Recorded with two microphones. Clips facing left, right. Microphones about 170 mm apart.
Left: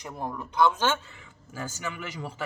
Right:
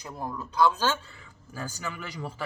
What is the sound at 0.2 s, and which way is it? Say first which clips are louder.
Speech: even; 20° left (ahead or behind).